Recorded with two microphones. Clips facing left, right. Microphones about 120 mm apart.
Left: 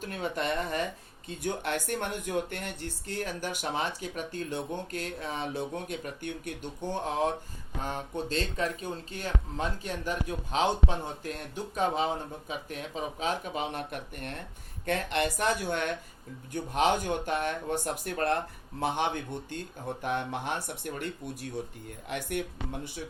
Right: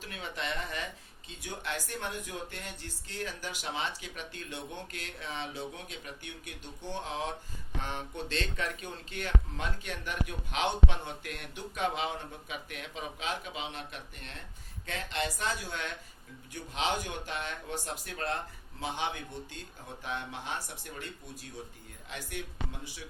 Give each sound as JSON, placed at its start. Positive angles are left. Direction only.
{"t": 0.0, "sound": "speech", "side_deg": 50}
{"t": 1.3, "sound": "speech", "side_deg": 55}